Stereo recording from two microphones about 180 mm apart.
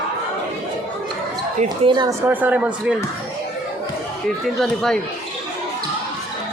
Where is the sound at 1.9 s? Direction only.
25° right (ahead or behind).